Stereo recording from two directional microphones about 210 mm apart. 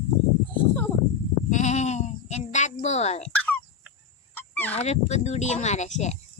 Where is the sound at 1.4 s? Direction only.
35° left (ahead or behind).